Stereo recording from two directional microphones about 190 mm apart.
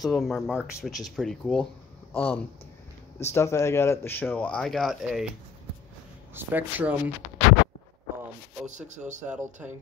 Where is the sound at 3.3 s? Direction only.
15° left (ahead or behind); by 5.2 s centre (ahead or behind).